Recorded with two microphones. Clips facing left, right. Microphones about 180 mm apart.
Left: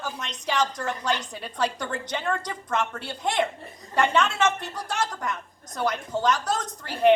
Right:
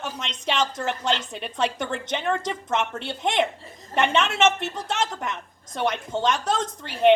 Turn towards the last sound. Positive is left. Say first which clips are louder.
# right 1 dB
turn(degrees=-25)  # may be behind; listen again after turning